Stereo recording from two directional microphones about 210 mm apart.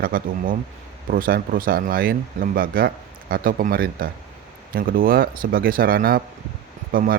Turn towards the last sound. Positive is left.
turn(degrees=-45)  # may be behind; listen again after turning